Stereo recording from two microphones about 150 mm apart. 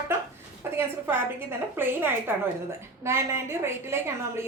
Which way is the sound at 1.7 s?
15° right (ahead or behind).